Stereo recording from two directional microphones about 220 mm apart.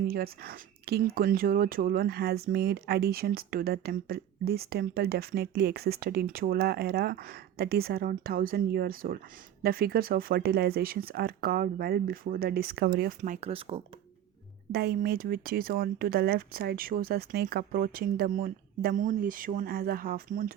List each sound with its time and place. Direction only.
0.1 s speech: 45° right (ahead or behind); by 13.8 s 25° right (ahead or behind)
14.7 s speech: 45° right (ahead or behind)